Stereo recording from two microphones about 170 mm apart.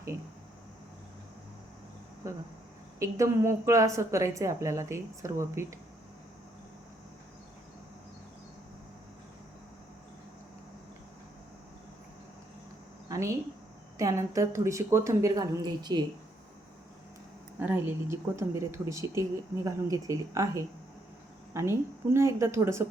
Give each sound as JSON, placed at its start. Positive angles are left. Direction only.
{"t": 3.0, "sound": "a woman's voice", "side_deg": -20}
{"t": 13.1, "sound": "a sound", "side_deg": -20}
{"t": 14.0, "sound": "a woman's voice", "side_deg": -20}
{"t": 17.6, "sound": "a woman's voice", "side_deg": -10}